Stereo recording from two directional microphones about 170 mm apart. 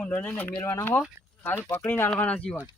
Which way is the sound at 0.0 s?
10° left (ahead or behind).